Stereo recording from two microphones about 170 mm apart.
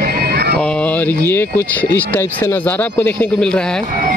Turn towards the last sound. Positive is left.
turn(degrees=5)  # may be behind; listen again after turning